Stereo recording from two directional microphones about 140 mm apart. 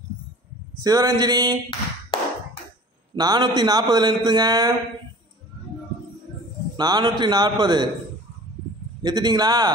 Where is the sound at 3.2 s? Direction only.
30° right (ahead or behind).